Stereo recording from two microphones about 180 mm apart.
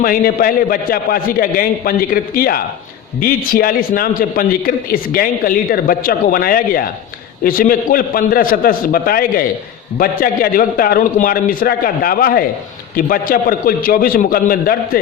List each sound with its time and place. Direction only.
0.0 s a man's voice: 55° left (ahead or behind)